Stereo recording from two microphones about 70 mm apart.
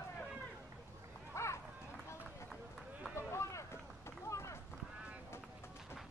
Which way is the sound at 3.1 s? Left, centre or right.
Left.